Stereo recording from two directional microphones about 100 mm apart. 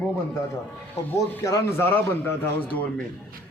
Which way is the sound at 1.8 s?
20° left (ahead or behind).